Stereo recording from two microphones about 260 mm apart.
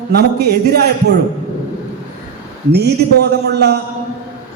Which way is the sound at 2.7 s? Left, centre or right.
Right.